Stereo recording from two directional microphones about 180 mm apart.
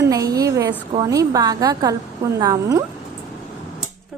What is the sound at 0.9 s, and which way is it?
A woman's voice, 20° right (ahead or behind).